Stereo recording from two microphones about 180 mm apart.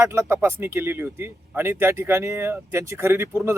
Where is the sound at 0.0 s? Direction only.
15° right (ahead or behind).